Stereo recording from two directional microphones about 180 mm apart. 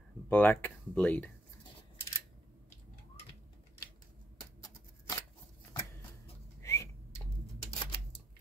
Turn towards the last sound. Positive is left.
turn(degrees=15)  # may be behind; listen again after turning